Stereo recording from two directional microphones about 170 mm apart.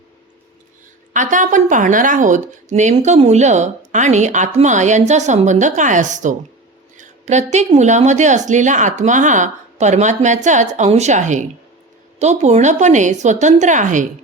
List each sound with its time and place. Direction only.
1.1 s speech: 50° right (ahead or behind)